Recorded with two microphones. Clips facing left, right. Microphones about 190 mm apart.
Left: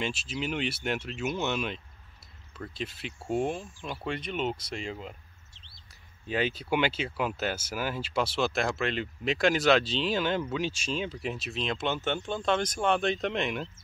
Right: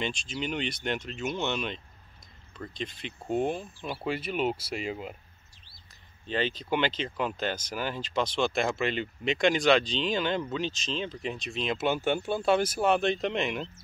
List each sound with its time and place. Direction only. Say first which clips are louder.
0.0 s speech: even; 5° left (ahead or behind)
5.5 s bird: left 1 dB; 25° left (ahead or behind)
6.2 s speech: even; 10° left (ahead or behind)